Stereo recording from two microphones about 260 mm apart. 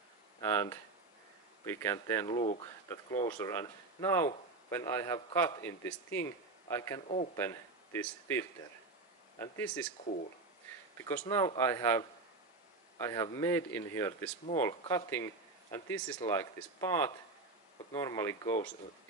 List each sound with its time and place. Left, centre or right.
0.4 s a man's voice: centre
2.2 s speech: left
2.6 s a man's voice: centre
11.0 s a man's voice: centre
13.0 s a man's voice: centre